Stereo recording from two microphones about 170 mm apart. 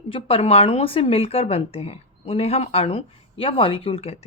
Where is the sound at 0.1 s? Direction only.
35° left (ahead or behind).